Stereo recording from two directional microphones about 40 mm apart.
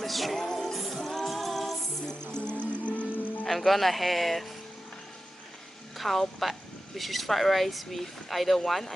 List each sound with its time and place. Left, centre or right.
0.0 s music: centre
2.0 s music: left
3.4 s speech: centre
5.9 s a woman's voice: centre